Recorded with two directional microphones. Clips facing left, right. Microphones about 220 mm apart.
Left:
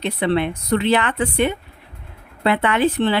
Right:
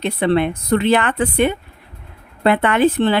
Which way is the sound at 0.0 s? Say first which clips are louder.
Right 3 dB; 50° right (ahead or behind).